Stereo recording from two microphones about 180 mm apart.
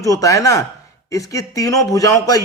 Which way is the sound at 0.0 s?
20° left (ahead or behind).